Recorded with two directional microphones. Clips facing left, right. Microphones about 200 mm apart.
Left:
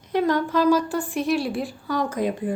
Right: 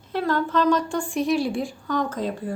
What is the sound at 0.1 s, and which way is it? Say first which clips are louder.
A woman's voice: left 2 dB; 15° left (ahead or behind).